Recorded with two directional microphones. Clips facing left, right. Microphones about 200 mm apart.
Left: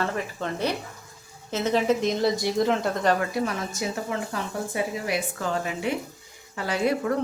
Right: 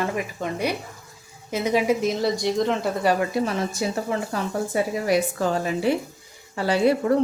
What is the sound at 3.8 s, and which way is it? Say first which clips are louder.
A woman's voice: right 4 dB; 35° right (ahead or behind).